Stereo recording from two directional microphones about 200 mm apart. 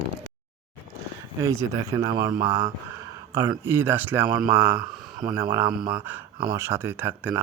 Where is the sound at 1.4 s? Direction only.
15° right (ahead or behind).